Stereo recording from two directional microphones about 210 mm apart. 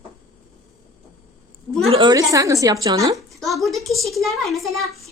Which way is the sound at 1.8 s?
25° right (ahead or behind).